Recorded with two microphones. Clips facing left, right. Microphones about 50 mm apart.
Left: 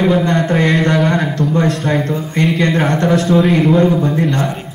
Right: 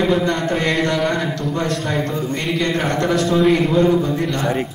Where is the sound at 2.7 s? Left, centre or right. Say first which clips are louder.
Left 5 dB; left.